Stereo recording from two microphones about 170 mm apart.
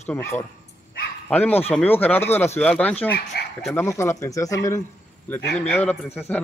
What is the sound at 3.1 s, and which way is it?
Speech, 70° left (ahead or behind).